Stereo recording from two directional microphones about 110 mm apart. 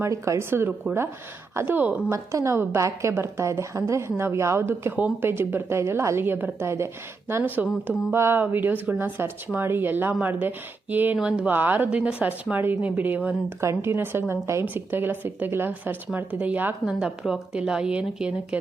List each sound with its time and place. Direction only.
0.0 s speech: 25° right (ahead or behind)
2.0 s speech: 25° right (ahead or behind)
16.8 s speech: 5° right (ahead or behind)